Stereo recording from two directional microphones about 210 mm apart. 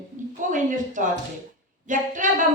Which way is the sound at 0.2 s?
35° right (ahead or behind).